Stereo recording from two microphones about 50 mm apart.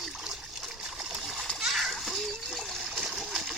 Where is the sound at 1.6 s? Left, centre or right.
Centre.